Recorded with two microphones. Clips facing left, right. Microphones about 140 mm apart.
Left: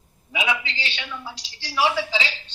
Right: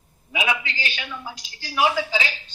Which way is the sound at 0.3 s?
30° right (ahead or behind).